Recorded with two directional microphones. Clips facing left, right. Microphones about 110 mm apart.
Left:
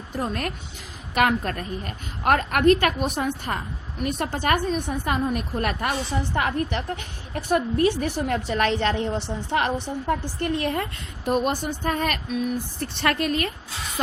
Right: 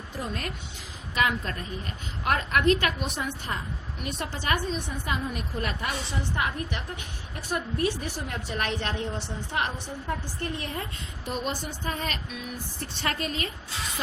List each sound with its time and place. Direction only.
0.2 s a woman's voice: 50° left (ahead or behind)
7.3 s a woman's voice: 80° left
11.3 s a woman's voice: 50° left (ahead or behind)
13.0 s a woman's voice: 60° left (ahead or behind)